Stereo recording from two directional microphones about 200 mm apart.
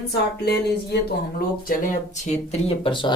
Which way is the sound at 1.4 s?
45° left (ahead or behind).